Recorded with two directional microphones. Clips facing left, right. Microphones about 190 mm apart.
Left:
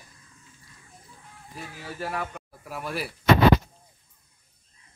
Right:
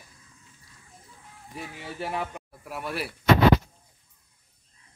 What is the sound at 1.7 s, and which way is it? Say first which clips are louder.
Speech: even; 20° right (ahead or behind).